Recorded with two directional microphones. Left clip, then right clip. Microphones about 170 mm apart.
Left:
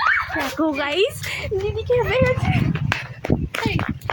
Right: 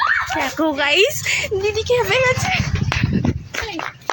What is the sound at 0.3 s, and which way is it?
Speech, centre (ahead or behind).